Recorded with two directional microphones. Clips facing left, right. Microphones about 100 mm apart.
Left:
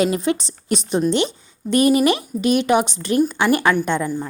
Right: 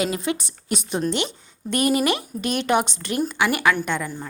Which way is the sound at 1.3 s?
20° right (ahead or behind).